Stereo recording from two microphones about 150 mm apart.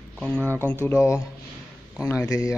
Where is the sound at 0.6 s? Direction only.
15° left (ahead or behind).